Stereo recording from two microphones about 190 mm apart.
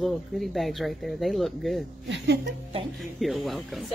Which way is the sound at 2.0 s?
65° right (ahead or behind).